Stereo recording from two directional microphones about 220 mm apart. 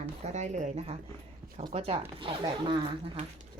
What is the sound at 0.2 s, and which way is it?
Speech, 30° right (ahead or behind).